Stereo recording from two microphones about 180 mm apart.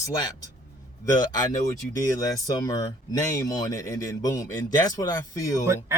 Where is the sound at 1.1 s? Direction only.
20° left (ahead or behind).